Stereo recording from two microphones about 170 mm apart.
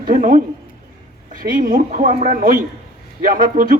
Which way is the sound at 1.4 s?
55° right (ahead or behind).